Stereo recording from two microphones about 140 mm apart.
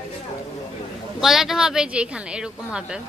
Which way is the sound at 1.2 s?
Centre (ahead or behind).